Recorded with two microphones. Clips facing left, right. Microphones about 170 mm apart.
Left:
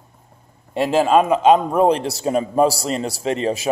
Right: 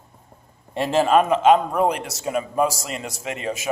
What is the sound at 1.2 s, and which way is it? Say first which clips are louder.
A man's voice: left 2 dB; 20° left (ahead or behind).